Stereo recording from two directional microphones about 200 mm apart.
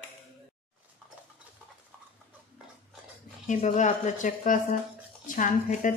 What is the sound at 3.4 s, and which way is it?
A woman's voice, 35° left (ahead or behind).